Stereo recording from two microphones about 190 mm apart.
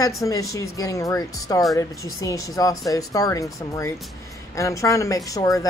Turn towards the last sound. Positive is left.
turn(degrees=20)  # may be behind; listen again after turning